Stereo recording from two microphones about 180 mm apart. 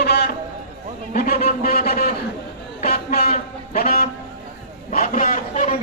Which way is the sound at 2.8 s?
55° left (ahead or behind).